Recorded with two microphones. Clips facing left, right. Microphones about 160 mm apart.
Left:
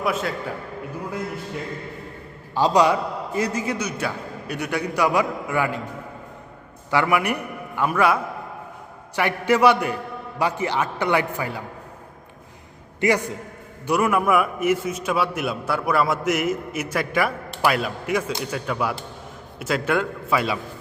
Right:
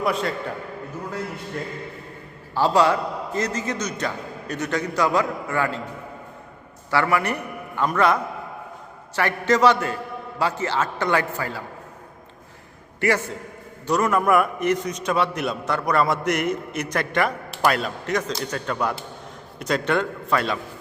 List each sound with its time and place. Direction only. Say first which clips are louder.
0.0 s a man's voice: right 1 dB; centre (ahead or behind)
2.6 s a man's voice: left 1 dB; 15° left (ahead or behind)
6.9 s a man's voice: left 1 dB; 15° left (ahead or behind)
13.0 s a man's voice: left 1 dB; 15° left (ahead or behind)